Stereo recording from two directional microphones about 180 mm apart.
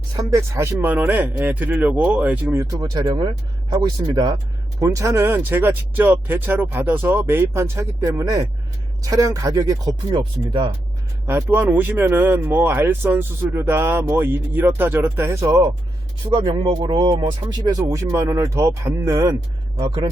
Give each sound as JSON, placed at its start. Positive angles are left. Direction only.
{"t": 0.2, "sound": "speech", "side_deg": -15}
{"t": 11.3, "sound": "speech", "side_deg": -15}